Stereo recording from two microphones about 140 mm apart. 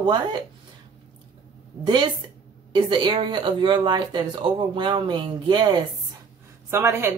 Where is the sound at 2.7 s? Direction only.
30° right (ahead or behind).